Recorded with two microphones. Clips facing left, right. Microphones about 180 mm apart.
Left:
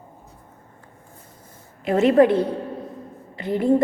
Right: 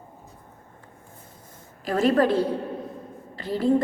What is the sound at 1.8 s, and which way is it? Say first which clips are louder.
A woman's voice: left 5 dB; 25° left (ahead or behind).